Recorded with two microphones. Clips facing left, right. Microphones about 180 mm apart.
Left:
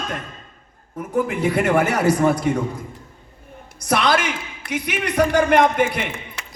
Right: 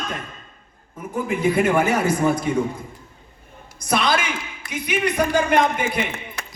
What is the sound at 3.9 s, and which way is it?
A man's voice, 65° left (ahead or behind).